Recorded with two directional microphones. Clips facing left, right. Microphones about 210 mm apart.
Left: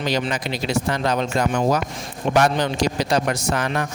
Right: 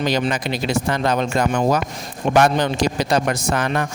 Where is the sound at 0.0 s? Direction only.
50° right (ahead or behind).